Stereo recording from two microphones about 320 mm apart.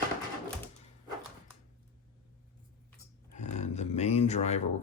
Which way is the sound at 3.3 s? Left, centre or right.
Left.